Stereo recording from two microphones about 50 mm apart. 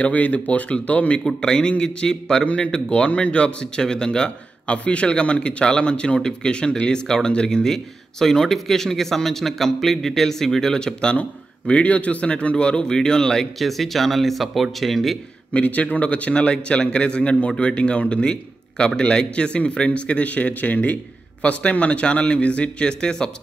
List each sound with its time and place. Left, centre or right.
0.0 s a man's voice: left
1.2 s a man's voice: centre
15.5 s a man's voice: left